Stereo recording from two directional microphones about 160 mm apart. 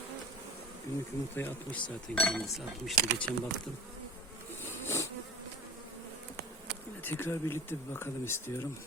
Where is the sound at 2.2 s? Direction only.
Centre (ahead or behind).